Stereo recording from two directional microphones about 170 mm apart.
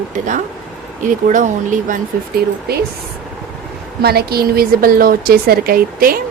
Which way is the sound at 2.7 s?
70° right (ahead or behind).